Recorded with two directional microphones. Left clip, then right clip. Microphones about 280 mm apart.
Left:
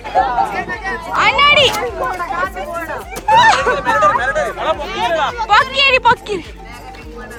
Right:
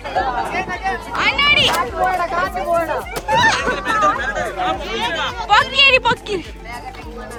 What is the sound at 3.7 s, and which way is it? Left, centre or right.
Speech, centre.